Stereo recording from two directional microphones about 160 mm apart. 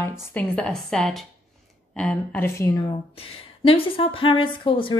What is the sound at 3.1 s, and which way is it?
Speech, 35° left (ahead or behind).